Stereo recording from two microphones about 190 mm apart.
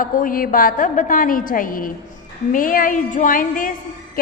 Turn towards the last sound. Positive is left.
turn(degrees=45)  # may be behind; listen again after turning